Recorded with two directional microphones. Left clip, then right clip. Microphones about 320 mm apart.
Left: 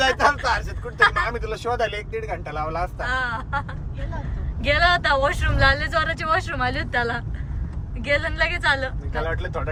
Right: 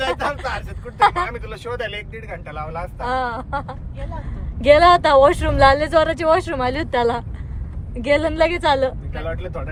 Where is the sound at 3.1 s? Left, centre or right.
Centre.